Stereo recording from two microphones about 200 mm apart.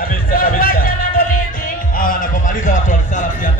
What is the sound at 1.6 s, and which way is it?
Music, 45° left (ahead or behind).